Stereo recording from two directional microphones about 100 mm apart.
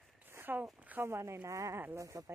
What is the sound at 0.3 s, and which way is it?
Speech, 20° right (ahead or behind).